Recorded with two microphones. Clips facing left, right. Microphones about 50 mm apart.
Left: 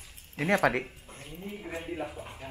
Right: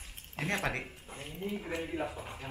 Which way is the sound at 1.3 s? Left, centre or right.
Right.